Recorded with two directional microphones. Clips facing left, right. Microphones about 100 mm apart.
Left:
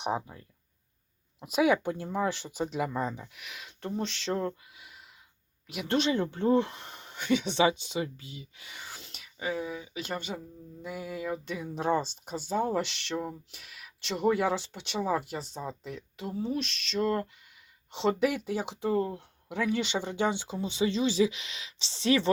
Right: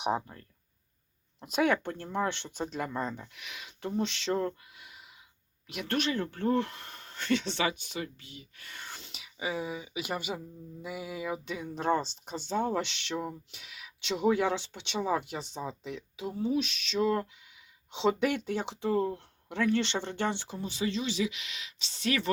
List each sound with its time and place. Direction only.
0.0 s speech: centre (ahead or behind)
5.9 s speech: 20° left (ahead or behind)